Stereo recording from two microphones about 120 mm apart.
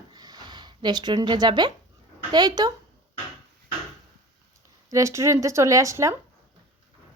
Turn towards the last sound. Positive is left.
turn(degrees=-25)  # may be behind; listen again after turning